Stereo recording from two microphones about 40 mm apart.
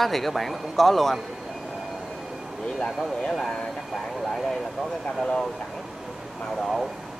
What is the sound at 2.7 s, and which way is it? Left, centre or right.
Speech, left.